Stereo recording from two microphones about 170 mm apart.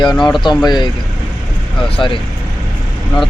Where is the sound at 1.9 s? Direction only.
30° left (ahead or behind).